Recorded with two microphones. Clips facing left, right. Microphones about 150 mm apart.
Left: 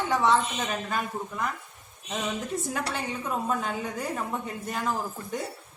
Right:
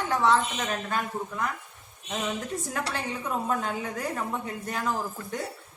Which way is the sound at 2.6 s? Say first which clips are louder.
Left 1 dB; centre (ahead or behind).